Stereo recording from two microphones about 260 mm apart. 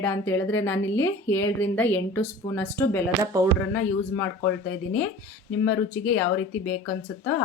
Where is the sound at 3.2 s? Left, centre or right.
Centre.